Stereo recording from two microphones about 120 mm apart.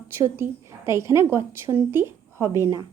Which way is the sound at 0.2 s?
20° right (ahead or behind).